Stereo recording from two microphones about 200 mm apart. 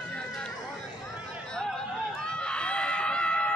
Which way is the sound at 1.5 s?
5° left (ahead or behind).